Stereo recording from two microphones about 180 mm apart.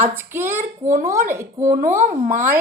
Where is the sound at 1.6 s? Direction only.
45° right (ahead or behind).